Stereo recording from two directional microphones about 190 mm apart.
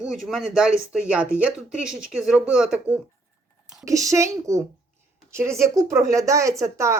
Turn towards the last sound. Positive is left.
turn(degrees=-15)  # may be behind; listen again after turning